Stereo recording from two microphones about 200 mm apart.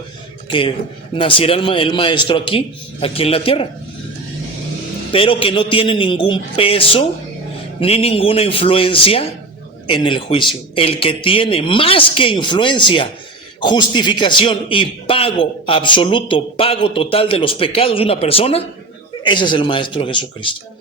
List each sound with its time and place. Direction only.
0.4 s a man's voice: 25° left (ahead or behind)
5.1 s a man's voice: 25° left (ahead or behind)